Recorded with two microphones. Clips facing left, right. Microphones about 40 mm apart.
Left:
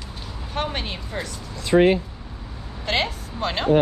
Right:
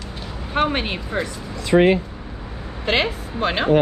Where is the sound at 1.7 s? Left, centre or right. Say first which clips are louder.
Right 1 dB; right.